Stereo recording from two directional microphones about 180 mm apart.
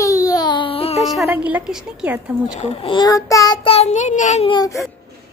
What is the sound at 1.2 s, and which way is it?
A woman's voice, 10° right (ahead or behind).